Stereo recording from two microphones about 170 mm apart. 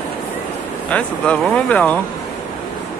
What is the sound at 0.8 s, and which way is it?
Speech, 5° left (ahead or behind).